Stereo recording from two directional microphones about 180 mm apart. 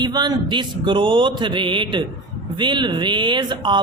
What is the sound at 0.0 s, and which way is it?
A man's voice, 25° right (ahead or behind).